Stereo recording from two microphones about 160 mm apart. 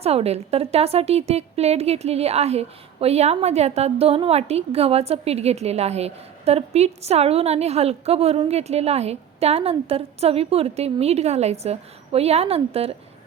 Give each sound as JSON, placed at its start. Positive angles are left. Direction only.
{"t": 0.0, "sound": "speech", "side_deg": -40}